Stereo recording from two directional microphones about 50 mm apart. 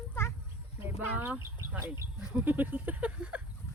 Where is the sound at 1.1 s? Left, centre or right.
Right.